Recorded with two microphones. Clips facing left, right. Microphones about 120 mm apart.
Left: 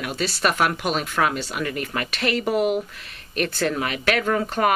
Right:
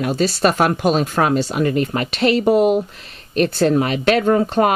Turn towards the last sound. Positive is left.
turn(degrees=-30)  # may be behind; listen again after turning